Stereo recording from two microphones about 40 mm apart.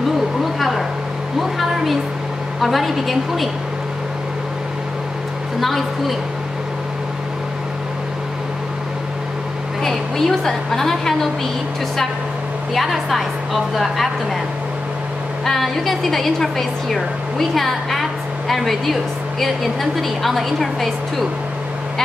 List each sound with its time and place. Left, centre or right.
0.4 s a sound: centre
2.6 s a woman's voice: centre
5.6 s a woman's voice: centre
9.8 s a woman's voice: centre
12.7 s a woman's voice: centre
15.4 s a woman's voice: centre